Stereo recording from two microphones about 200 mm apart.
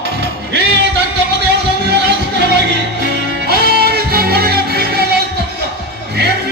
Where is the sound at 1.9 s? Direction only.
55° right (ahead or behind).